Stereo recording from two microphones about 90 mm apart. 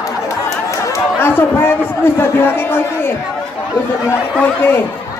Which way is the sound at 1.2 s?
25° left (ahead or behind).